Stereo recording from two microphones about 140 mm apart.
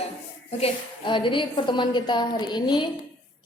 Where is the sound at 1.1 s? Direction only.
35° left (ahead or behind).